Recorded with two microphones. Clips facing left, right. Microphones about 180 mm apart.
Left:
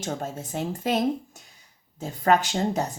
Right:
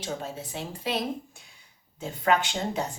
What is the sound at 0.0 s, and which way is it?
Speech, 45° left (ahead or behind).